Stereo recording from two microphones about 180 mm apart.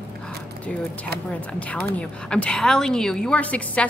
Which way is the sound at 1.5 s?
5° left (ahead or behind).